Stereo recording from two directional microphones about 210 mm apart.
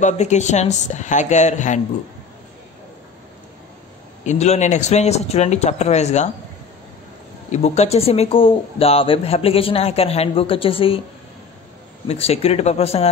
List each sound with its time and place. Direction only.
0.0 s a man's voice: 35° left (ahead or behind)
4.2 s a man's voice: 35° left (ahead or behind)
7.4 s speech: 30° left (ahead or behind)
12.1 s speech: 30° left (ahead or behind)